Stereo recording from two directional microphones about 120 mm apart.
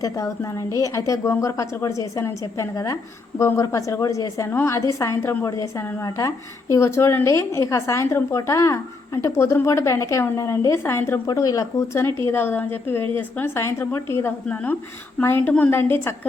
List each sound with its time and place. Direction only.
0.0 s a woman's voice: 25° left (ahead or behind)